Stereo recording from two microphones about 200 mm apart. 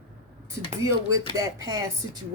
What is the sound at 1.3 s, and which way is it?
Speech, 15° right (ahead or behind).